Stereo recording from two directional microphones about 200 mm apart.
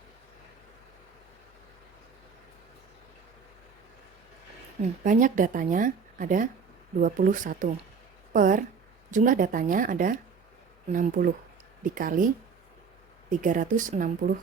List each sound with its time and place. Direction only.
5.0 s speech: 40° right (ahead or behind)
13.3 s speech: 40° right (ahead or behind)